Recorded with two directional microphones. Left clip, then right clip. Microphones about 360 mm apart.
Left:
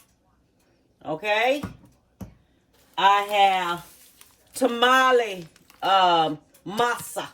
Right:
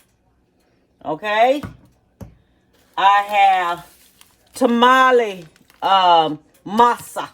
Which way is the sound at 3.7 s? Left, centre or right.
Centre.